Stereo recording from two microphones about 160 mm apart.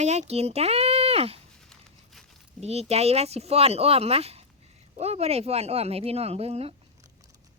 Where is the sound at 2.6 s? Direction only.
40° right (ahead or behind).